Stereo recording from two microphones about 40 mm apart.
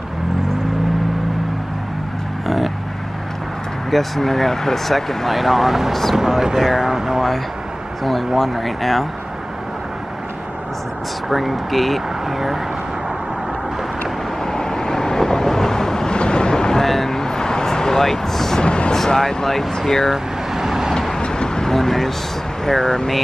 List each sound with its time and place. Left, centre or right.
2.4 s vehicle: centre
3.9 s speech: centre
8.0 s speech: centre
11.2 s speech: centre
14.4 s vehicle: centre
16.8 s vehicle: centre
18.6 s a sound: left
19.0 s speech: centre
20.1 s vehicle: centre
21.2 s vehicle: left
22.7 s speech: centre